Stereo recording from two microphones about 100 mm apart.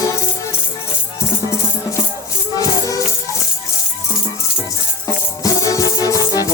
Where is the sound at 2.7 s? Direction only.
35° left (ahead or behind).